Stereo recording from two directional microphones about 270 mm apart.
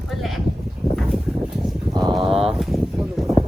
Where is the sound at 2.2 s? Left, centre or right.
Right.